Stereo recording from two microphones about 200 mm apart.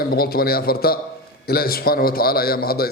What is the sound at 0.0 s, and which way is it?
A man's voice, 50° left (ahead or behind).